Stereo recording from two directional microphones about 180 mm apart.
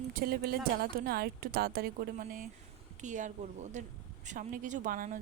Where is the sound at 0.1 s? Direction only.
55° right (ahead or behind).